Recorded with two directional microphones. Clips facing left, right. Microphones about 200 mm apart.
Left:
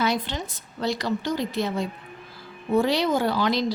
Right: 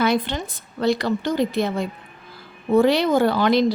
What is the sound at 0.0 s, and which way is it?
Speech, 55° right (ahead or behind).